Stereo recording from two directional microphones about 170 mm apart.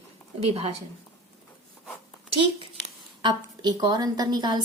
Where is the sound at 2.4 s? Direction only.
30° right (ahead or behind).